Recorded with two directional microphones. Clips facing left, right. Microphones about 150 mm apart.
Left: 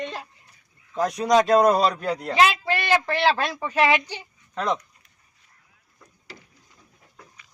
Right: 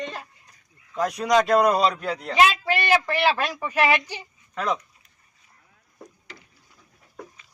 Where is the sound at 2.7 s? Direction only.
10° right (ahead or behind).